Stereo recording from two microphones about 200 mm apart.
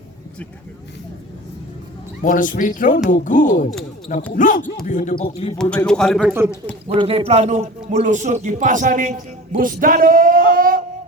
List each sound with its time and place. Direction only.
2.2 s speech: 40° left (ahead or behind)
5.6 s a man's voice: 5° left (ahead or behind)
6.8 s a man's voice: 25° right (ahead or behind); by 10.8 s 45° right (ahead or behind)